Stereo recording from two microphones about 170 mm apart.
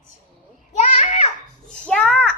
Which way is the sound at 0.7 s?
45° left (ahead or behind).